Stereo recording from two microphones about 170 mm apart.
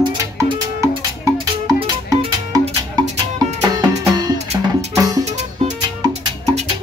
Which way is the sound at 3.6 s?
25° right (ahead or behind).